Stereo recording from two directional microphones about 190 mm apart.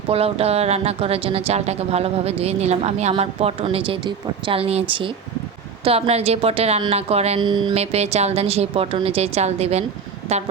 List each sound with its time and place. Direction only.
0.1 s speech: 30° right (ahead or behind)